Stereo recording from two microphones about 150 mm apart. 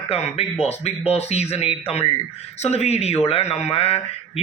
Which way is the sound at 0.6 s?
45° left (ahead or behind).